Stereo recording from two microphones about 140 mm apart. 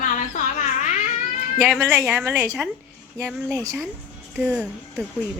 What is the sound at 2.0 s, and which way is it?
Speech, 15° right (ahead or behind).